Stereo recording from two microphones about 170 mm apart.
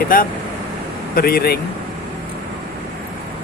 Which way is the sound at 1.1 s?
65° left (ahead or behind).